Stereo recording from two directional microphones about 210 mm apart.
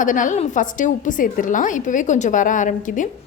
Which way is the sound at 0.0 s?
40° left (ahead or behind).